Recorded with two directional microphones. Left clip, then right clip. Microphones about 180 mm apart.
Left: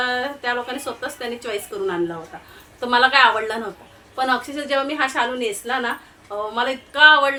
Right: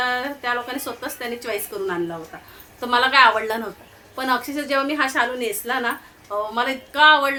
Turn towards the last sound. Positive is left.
turn(degrees=-15)  # may be behind; listen again after turning